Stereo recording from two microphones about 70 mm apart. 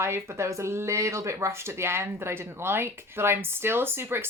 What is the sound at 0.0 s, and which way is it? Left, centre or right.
Speech, right.